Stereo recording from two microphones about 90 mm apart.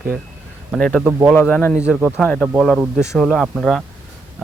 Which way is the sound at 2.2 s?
10° left (ahead or behind).